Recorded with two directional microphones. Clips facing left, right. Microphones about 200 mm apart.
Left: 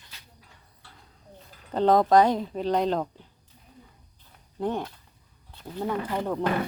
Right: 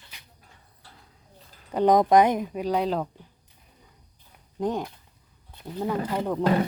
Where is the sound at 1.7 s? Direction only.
15° right (ahead or behind).